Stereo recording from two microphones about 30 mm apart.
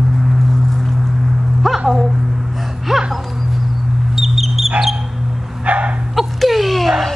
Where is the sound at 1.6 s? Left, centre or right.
Centre.